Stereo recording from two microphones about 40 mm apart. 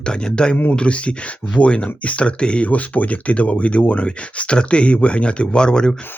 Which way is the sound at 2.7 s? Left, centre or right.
Left.